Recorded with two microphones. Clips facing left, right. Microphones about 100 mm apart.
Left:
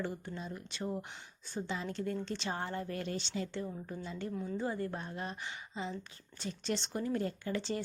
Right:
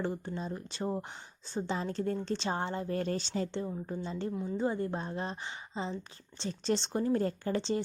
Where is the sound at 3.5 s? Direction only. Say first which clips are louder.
Right 4 dB; 25° right (ahead or behind).